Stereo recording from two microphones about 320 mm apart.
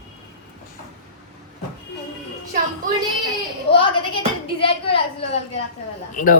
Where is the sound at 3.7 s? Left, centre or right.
Centre.